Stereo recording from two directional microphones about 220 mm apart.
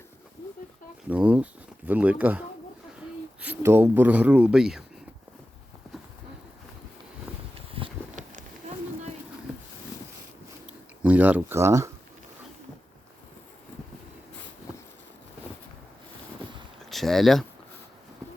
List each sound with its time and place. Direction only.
1.0 s speech: 5° right (ahead or behind)
3.4 s speech: 10° right (ahead or behind)
7.5 s a sound: 25° right (ahead or behind)
11.0 s speech: 5° right (ahead or behind)
16.9 s speech: centre (ahead or behind)